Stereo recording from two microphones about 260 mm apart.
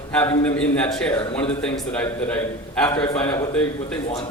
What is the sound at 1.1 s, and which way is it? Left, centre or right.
Speech, centre.